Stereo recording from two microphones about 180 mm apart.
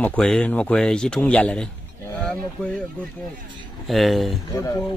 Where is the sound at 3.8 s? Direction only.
Centre (ahead or behind).